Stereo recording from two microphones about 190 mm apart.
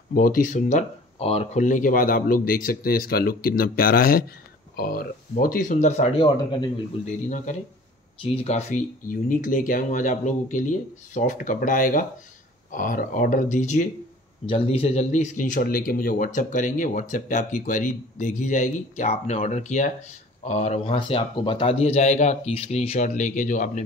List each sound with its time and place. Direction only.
0.1 s speech: 45° left (ahead or behind); by 6.6 s 25° left (ahead or behind)
7.2 s speech: 40° left (ahead or behind)
14.4 s speech: 30° left (ahead or behind)